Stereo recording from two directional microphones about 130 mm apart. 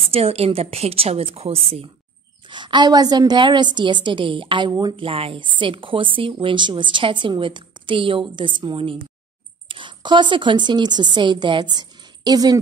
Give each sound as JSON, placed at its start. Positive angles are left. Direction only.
{"t": 0.1, "sound": "a woman's voice", "side_deg": -50}
{"t": 2.5, "sound": "a woman's voice", "side_deg": -35}